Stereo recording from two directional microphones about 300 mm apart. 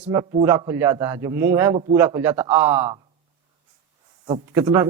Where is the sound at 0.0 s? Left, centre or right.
Centre.